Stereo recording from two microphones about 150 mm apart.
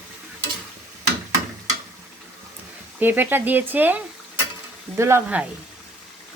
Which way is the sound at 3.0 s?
15° right (ahead or behind).